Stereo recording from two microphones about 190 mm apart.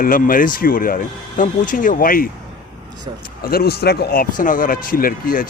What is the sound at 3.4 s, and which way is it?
Speech, 55° left (ahead or behind).